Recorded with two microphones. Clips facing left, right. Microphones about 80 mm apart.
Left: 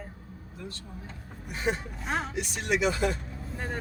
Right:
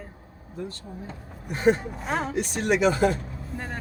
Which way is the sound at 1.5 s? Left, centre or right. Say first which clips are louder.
Right 9 dB; right.